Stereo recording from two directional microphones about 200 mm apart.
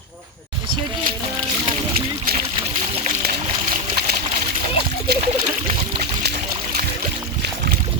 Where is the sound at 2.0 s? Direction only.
45° right (ahead or behind).